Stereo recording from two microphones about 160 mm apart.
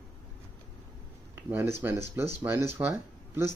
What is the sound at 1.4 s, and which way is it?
Speech, 15° right (ahead or behind).